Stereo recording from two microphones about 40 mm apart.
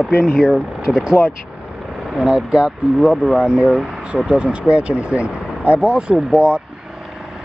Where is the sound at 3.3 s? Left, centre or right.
Centre.